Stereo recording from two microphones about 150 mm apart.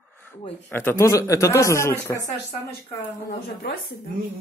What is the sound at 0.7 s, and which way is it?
Speech, 15° left (ahead or behind).